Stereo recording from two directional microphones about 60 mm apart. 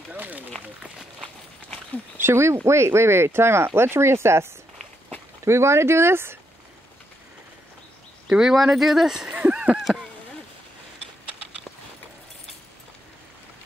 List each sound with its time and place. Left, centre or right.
0.1 s run: right
2.2 s speech: right
8.3 s speech: centre
9.3 s a sound: right